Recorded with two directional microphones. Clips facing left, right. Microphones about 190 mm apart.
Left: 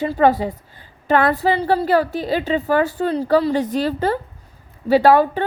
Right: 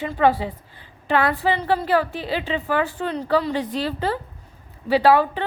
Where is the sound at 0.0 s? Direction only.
40° left (ahead or behind).